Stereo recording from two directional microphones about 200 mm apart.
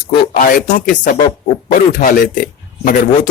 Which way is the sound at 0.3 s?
40° left (ahead or behind).